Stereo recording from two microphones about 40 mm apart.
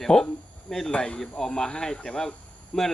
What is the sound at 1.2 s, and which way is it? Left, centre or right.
Speech, centre.